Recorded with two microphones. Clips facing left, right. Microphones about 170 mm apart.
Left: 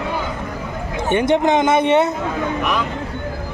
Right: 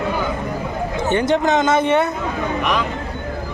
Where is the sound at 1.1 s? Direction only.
20° left (ahead or behind).